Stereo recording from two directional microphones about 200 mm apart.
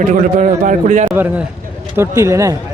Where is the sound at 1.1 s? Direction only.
10° right (ahead or behind).